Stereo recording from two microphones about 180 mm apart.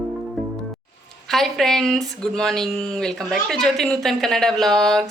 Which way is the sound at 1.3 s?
Centre (ahead or behind).